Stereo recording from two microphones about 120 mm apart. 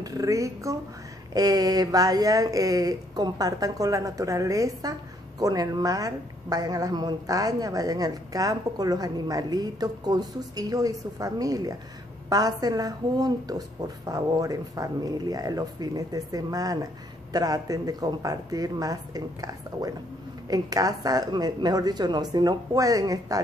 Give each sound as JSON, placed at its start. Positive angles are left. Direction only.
{"t": 0.0, "sound": "a woman's voice", "side_deg": -30}